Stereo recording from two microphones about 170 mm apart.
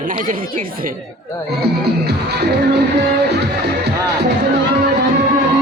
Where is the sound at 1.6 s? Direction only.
70° right (ahead or behind).